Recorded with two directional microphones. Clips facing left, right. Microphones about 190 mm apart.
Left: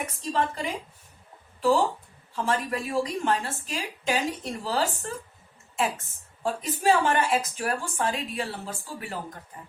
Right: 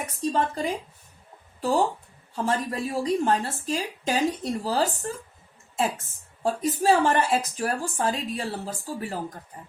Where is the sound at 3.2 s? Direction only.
35° right (ahead or behind).